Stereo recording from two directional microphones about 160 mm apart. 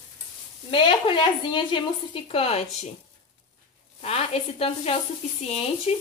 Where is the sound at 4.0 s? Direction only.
40° left (ahead or behind).